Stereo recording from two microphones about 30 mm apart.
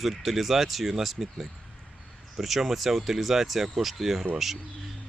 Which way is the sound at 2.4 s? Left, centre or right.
Centre.